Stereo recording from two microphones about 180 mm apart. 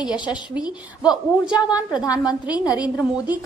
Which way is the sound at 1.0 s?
5° right (ahead or behind).